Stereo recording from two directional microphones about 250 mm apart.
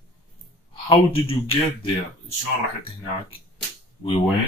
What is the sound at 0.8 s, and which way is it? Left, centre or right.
Speech, left.